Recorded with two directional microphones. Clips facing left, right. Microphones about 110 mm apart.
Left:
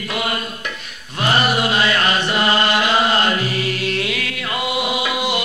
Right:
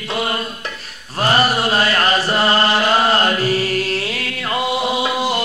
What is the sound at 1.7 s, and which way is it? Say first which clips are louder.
Chant: right 1 dB; 40° right (ahead or behind).